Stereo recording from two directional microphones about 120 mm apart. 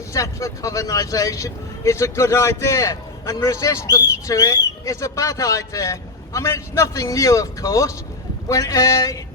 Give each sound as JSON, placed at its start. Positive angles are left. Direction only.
{"t": 0.1, "sound": "speech", "side_deg": 25}